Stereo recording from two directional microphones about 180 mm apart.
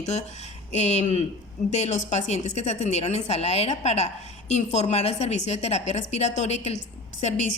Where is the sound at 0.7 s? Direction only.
35° left (ahead or behind).